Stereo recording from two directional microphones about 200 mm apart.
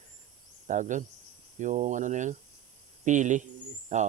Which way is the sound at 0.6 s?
40° right (ahead or behind).